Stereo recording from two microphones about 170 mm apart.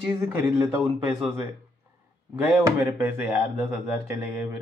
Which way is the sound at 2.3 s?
10° right (ahead or behind).